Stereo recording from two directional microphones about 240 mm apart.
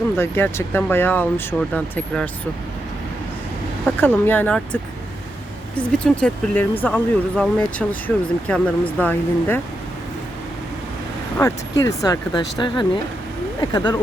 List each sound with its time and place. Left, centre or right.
0.2 s speech: centre
4.0 s speech: centre
11.3 s speech: centre